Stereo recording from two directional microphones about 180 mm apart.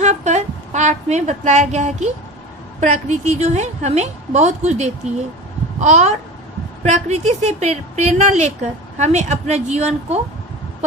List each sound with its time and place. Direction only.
0.0 s a woman's voice: 40° right (ahead or behind)